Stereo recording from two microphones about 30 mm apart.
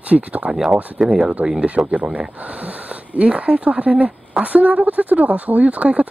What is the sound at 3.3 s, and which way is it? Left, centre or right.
Speech, right.